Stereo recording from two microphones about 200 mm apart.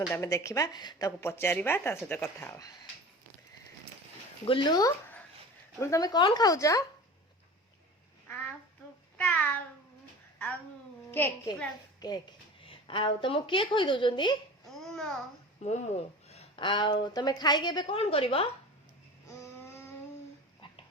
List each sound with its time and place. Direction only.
0.1 s a woman's voice: 15° left (ahead or behind)
4.4 s a woman's voice: 25° left (ahead or behind)
9.1 s a sound: 10° left (ahead or behind)
11.1 s a woman's voice: 10° left (ahead or behind)
14.8 s babbling: centre (ahead or behind)
15.6 s speech: 35° left (ahead or behind)
19.3 s a sound: 15° left (ahead or behind)